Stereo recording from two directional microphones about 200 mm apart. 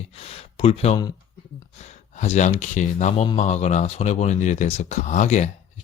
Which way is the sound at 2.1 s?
35° left (ahead or behind).